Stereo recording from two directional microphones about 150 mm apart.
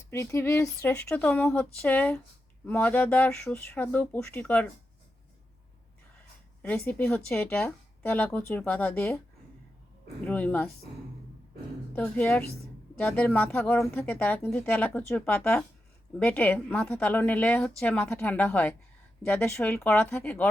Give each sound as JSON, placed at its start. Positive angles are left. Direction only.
{"t": 0.1, "sound": "speech", "side_deg": 20}
{"t": 6.6, "sound": "speech", "side_deg": 10}
{"t": 10.2, "sound": "speech", "side_deg": 10}
{"t": 11.9, "sound": "speech", "side_deg": 10}